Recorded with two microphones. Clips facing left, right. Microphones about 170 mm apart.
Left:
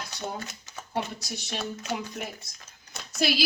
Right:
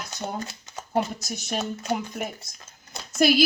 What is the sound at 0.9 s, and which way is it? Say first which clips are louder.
Speech: right 6 dB; 45° right (ahead or behind).